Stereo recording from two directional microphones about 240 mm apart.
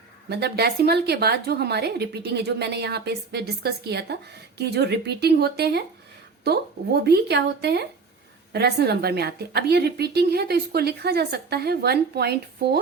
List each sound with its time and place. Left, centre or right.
0.3 s a woman's voice: right